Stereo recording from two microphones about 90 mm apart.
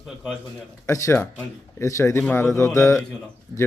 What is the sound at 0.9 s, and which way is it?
A man's voice, 35° left (ahead or behind).